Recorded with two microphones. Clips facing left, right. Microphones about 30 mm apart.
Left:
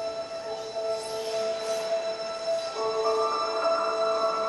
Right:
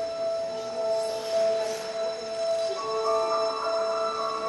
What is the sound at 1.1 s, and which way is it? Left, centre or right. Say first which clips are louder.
Train: right 4 dB; centre.